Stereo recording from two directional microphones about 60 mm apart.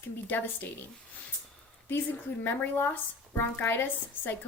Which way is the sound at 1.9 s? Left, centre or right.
Left.